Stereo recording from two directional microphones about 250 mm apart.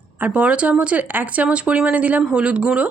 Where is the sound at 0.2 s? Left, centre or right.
Centre.